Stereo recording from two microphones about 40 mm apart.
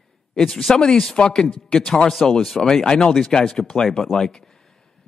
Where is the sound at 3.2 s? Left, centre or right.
Left.